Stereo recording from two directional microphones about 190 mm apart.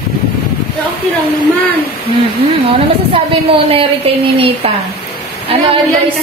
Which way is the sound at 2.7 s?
30° right (ahead or behind).